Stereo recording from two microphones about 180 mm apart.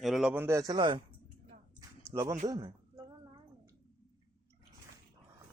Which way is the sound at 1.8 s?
15° right (ahead or behind).